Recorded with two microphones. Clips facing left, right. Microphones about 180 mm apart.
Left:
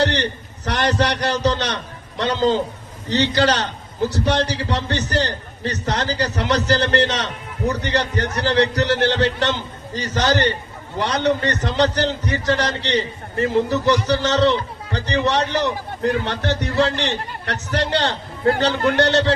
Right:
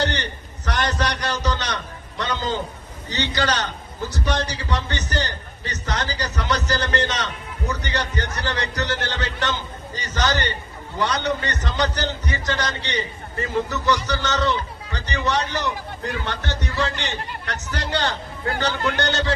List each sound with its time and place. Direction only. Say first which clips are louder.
0.2 s a man's voice: left 7 dB; 30° left (ahead or behind)